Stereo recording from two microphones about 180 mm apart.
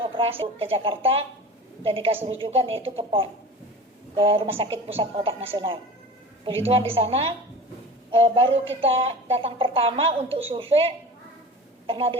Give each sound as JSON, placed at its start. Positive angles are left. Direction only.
{"t": 0.0, "sound": "speech", "side_deg": -30}